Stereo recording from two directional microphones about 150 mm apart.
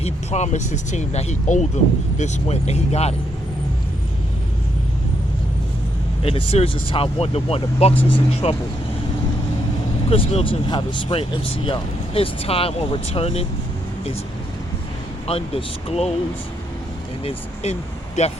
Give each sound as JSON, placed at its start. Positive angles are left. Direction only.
{"t": 0.0, "sound": "speech", "side_deg": 50}
{"t": 6.2, "sound": "speech", "side_deg": 40}
{"t": 10.1, "sound": "speech", "side_deg": 40}
{"t": 15.3, "sound": "speech", "side_deg": 40}
{"t": 17.2, "sound": "speech", "side_deg": 45}